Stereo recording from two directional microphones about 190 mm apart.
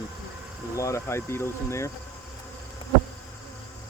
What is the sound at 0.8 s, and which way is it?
Cricket, 15° left (ahead or behind).